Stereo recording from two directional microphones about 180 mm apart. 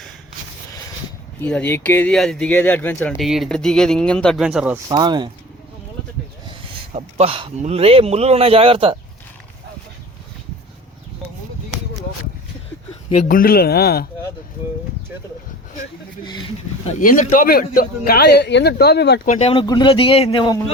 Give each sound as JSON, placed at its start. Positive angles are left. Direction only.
{"t": 1.4, "sound": "speech", "side_deg": 10}
{"t": 3.1, "sound": "speech", "side_deg": 0}
{"t": 4.4, "sound": "speech", "side_deg": -5}
{"t": 4.9, "sound": "speech", "side_deg": -25}
{"t": 6.5, "sound": "a sound", "side_deg": -30}
{"t": 7.6, "sound": "speech", "side_deg": -35}
{"t": 13.2, "sound": "speech", "side_deg": 55}
{"t": 17.0, "sound": "speech", "side_deg": 45}
{"t": 19.2, "sound": "speech", "side_deg": 40}
{"t": 19.6, "sound": "speech", "side_deg": 25}